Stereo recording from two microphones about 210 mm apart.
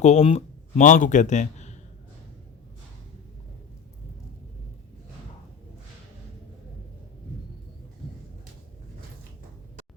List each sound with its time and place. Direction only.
0.0 s speech: 30° left (ahead or behind)